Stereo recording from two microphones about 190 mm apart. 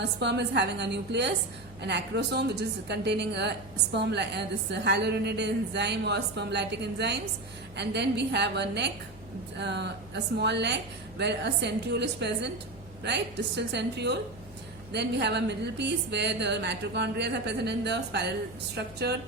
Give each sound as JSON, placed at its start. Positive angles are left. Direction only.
{"t": 0.0, "sound": "a woman's voice", "side_deg": -65}